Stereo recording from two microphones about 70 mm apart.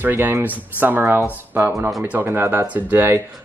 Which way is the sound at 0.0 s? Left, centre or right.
Right.